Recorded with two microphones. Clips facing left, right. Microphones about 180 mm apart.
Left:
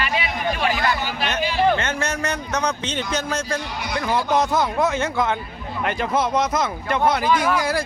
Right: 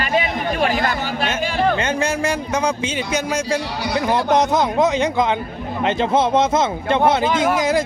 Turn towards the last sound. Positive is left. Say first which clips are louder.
# right 3 dB
turn(degrees=-20)  # may be behind; listen again after turning